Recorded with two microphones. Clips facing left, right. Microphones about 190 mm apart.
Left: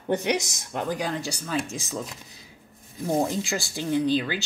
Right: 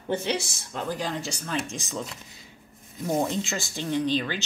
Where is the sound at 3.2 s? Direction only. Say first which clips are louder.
Left 1 dB; 10° left (ahead or behind).